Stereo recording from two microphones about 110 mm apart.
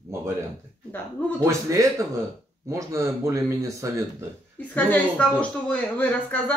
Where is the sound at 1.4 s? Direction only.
30° right (ahead or behind).